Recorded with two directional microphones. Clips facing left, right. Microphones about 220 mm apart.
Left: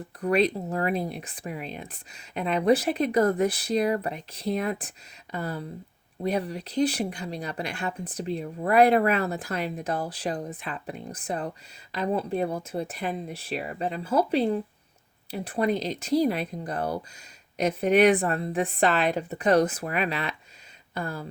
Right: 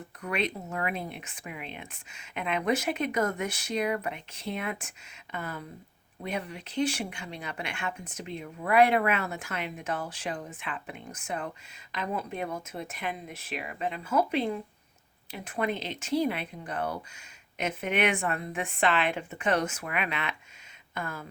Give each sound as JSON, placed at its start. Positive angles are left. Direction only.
{"t": 0.2, "sound": "speech", "side_deg": 35}